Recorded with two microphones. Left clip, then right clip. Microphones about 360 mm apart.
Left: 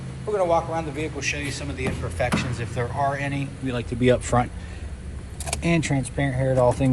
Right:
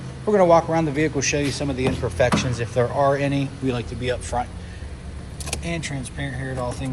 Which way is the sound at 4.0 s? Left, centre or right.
Centre.